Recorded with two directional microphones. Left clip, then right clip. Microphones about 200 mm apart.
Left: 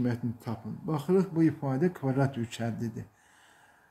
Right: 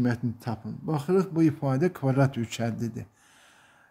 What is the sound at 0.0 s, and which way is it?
Speech, 35° right (ahead or behind).